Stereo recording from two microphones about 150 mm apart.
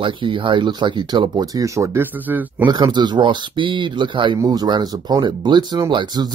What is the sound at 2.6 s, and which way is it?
Speech, 30° right (ahead or behind).